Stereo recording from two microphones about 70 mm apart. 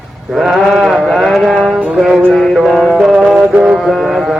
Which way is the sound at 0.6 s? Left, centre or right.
Centre.